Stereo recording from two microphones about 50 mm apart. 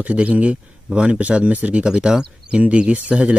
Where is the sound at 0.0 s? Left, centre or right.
Right.